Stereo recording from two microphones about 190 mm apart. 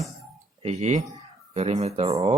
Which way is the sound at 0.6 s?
35° right (ahead or behind).